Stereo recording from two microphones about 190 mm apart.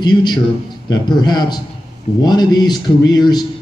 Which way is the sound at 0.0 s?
25° left (ahead or behind).